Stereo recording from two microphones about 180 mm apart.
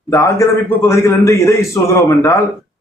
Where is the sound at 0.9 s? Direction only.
15° left (ahead or behind).